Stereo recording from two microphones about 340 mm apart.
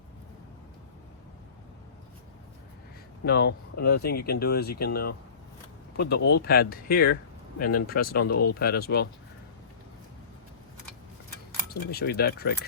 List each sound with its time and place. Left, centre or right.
3.2 s speech: left
11.7 s speech: left